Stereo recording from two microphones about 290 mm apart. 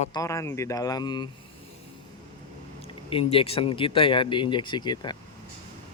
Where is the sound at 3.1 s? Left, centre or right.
Centre.